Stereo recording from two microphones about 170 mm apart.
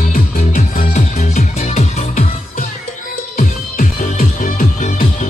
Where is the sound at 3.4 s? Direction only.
50° left (ahead or behind).